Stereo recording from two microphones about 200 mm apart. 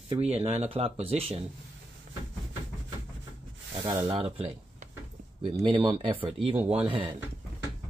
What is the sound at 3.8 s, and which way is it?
Speech, 20° right (ahead or behind).